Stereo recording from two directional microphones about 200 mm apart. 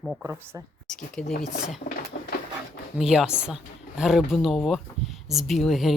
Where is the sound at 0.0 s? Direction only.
Centre (ahead or behind).